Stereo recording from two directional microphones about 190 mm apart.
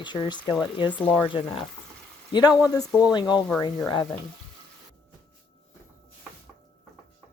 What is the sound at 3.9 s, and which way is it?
Speech, 20° left (ahead or behind).